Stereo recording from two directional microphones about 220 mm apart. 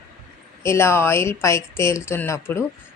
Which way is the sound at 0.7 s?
10° left (ahead or behind).